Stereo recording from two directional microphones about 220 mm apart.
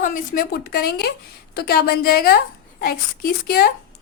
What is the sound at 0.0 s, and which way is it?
A woman's voice, 40° left (ahead or behind).